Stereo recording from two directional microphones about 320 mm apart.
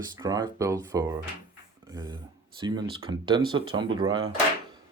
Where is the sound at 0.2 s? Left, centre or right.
Centre.